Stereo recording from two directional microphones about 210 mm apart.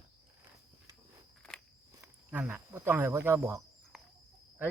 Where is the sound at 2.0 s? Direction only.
5° right (ahead or behind).